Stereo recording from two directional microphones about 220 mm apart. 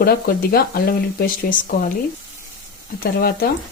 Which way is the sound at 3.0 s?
45° left (ahead or behind).